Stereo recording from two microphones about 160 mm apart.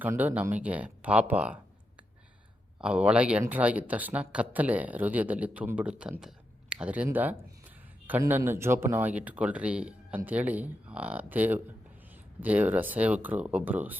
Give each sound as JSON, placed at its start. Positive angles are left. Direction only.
{"t": 0.0, "sound": "speech", "side_deg": -10}
{"t": 2.8, "sound": "speech", "side_deg": -5}